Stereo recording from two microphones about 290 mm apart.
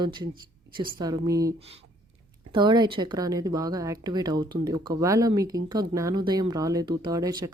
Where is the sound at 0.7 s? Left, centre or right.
Centre.